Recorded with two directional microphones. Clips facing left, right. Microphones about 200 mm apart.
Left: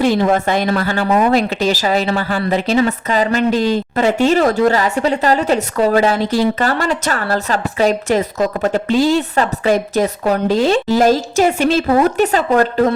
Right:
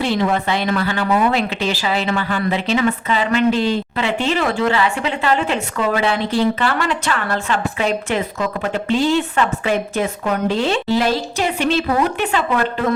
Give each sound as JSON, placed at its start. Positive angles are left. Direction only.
{"t": 0.0, "sound": "a woman's voice", "side_deg": 45}